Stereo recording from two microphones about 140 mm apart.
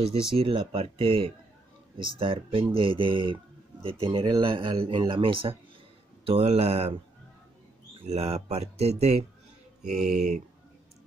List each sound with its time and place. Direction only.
0.0 s speech: 45° right (ahead or behind)
8.1 s speech: 45° right (ahead or behind)